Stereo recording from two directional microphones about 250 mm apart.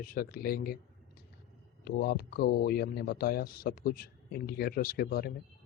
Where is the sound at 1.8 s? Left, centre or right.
Left.